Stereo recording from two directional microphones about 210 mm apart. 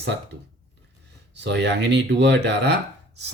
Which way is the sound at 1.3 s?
55° right (ahead or behind).